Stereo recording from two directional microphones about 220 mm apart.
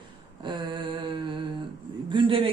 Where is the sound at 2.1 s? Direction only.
25° right (ahead or behind).